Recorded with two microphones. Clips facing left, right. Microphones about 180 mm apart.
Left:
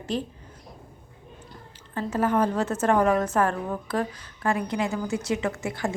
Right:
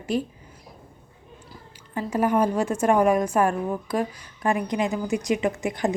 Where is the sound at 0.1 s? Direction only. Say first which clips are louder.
Right 3 dB; 10° right (ahead or behind).